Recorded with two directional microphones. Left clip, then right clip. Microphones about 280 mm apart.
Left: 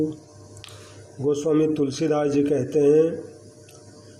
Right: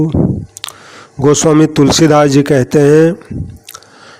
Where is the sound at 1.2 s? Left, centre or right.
Right.